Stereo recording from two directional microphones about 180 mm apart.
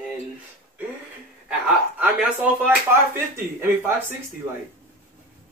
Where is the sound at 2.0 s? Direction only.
10° right (ahead or behind).